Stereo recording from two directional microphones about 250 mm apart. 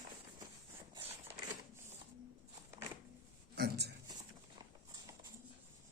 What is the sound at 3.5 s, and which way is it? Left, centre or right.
Speech, right.